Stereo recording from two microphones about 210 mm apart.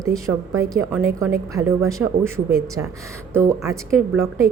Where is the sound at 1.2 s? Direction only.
15° right (ahead or behind).